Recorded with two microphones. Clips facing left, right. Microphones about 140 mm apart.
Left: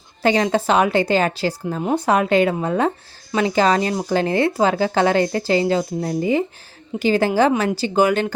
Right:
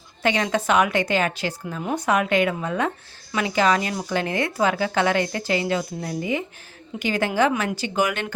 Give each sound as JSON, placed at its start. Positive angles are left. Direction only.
{"t": 0.2, "sound": "speech", "side_deg": 35}